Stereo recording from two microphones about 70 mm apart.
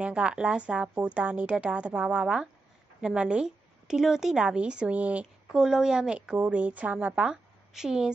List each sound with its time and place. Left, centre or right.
0.0 s a woman's voice: centre
5.2 s a woman's voice: centre
7.2 s a woman's voice: centre